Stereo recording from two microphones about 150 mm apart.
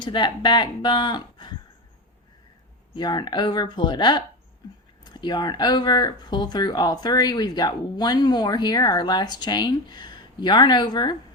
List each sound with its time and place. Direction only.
0.0 s speech: 30° left (ahead or behind)
2.9 s speech: 30° left (ahead or behind)